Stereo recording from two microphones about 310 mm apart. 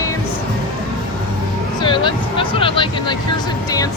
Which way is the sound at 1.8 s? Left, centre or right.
Centre.